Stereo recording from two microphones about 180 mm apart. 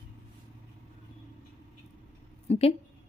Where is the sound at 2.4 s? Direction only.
35° left (ahead or behind).